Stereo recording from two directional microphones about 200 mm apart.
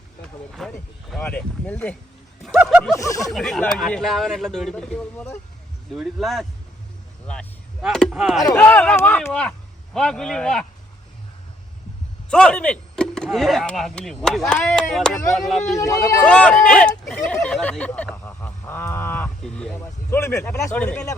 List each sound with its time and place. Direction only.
0.2 s speech: centre (ahead or behind)
3.0 s speech: 15° left (ahead or behind)
3.2 s speech: centre (ahead or behind)
12.3 s speech: 5° left (ahead or behind)
15.7 s speech: 15° left (ahead or behind)
16.2 s speech: 5° left (ahead or behind)
17.1 s a sound: 5° left (ahead or behind)